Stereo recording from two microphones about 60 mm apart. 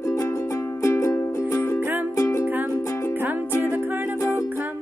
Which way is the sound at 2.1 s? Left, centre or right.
Left.